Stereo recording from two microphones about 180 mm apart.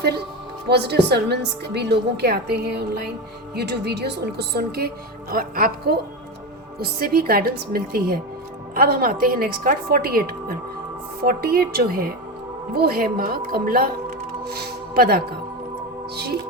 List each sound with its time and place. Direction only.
0.7 s a woman's voice: 65° right (ahead or behind)